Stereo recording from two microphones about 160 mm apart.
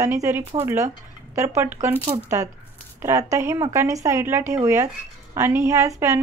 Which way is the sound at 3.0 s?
20° right (ahead or behind).